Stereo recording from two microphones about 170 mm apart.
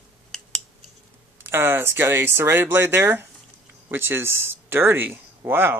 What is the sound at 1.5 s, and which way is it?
Speech, 15° right (ahead or behind).